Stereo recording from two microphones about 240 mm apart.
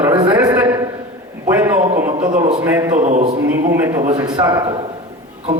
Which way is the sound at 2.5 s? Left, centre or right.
Centre.